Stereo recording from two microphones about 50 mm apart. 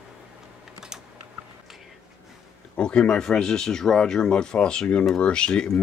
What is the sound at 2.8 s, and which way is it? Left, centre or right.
Speech, centre.